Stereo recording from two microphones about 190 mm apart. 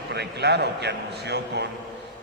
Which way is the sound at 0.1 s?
60° right (ahead or behind).